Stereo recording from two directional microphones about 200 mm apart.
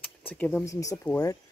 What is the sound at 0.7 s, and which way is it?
Speech, 15° left (ahead or behind).